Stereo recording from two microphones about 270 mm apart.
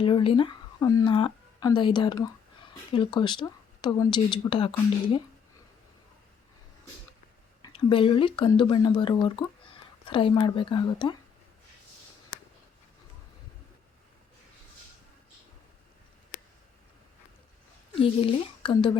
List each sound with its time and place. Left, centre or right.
0.0 s speech: centre
7.6 s speech: centre
17.9 s speech: left